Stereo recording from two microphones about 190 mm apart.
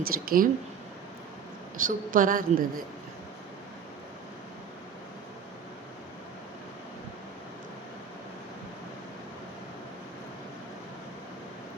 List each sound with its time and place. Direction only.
0.0 s a woman's voice: 50° right (ahead or behind)
1.8 s a woman's voice: 45° right (ahead or behind)